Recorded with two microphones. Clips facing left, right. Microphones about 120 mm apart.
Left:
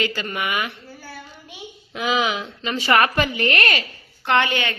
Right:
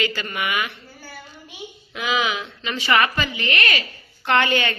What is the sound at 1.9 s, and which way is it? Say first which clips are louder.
A woman's voice: left 2 dB; 40° left (ahead or behind).